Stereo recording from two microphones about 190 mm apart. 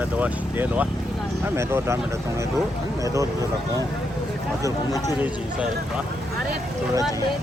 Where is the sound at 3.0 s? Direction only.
15° right (ahead or behind).